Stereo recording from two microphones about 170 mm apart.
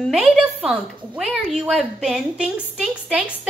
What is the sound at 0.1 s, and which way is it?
A woman's voice, 5° right (ahead or behind).